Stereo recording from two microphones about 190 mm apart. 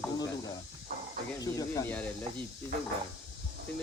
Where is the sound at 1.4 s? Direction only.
20° left (ahead or behind).